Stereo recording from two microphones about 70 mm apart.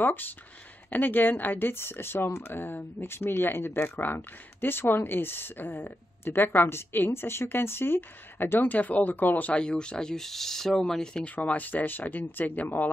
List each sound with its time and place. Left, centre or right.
0.0 s speech: left; by 11.2 s centre
11.2 s speech: left